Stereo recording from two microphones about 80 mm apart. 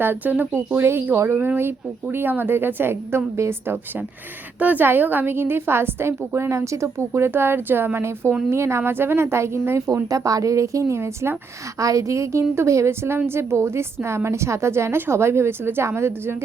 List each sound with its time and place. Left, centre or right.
0.0 s a woman's voice: right
4.6 s a woman's voice: right
11.8 s a woman's voice: right